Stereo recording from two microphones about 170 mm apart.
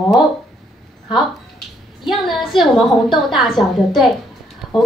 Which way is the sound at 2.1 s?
Centre (ahead or behind).